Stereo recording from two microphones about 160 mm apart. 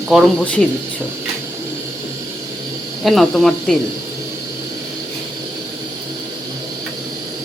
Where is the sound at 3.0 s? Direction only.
Centre (ahead or behind).